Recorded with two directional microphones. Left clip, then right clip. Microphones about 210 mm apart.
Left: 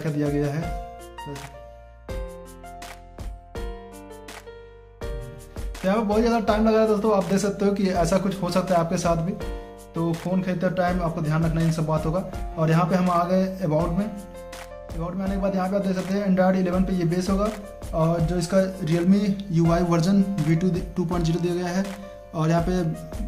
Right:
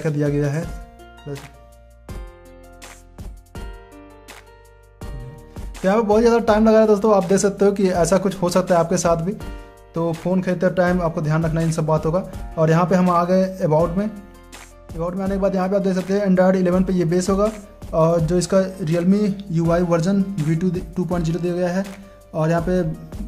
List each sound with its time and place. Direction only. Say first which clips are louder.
0.0 s speech: right 4 dB; 45° right (ahead or behind)
5.9 s speech: right 6 dB; 45° right (ahead or behind)